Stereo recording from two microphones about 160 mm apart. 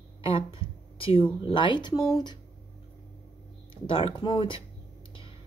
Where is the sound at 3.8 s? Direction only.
35° left (ahead or behind).